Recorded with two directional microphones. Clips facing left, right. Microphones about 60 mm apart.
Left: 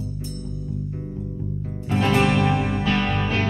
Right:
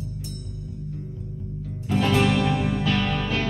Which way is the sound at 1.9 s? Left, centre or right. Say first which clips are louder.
Left 1 dB; left.